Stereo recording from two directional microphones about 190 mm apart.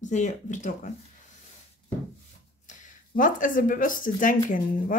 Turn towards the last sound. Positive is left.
turn(degrees=45)  # may be behind; listen again after turning